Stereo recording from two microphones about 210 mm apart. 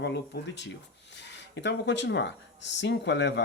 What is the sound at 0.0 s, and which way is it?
Speech, 55° left (ahead or behind).